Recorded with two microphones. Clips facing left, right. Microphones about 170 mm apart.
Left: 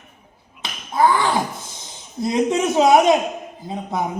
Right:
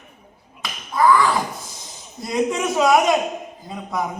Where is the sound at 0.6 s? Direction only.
30° left (ahead or behind).